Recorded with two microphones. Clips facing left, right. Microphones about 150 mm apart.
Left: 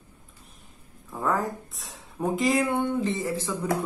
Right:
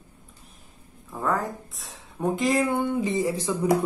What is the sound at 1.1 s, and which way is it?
Speech, centre (ahead or behind).